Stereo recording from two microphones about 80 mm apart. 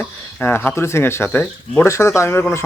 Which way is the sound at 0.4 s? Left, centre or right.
Left.